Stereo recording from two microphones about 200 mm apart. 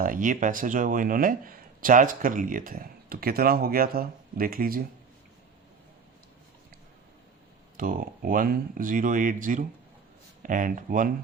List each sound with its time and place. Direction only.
0.0 s speech: 45° right (ahead or behind)
7.8 s speech: 45° right (ahead or behind)